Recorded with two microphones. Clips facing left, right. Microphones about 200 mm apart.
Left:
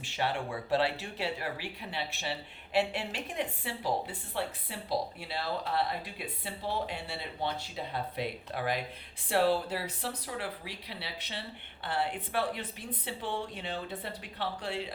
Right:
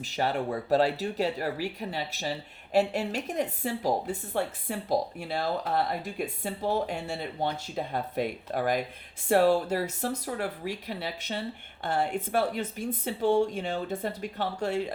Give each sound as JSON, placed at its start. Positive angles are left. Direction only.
{"t": 0.0, "sound": "speech", "side_deg": -40}